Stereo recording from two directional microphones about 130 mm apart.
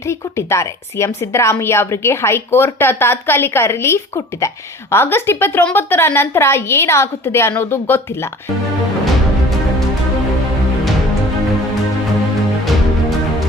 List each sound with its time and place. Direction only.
0.0 s speech: 20° left (ahead or behind)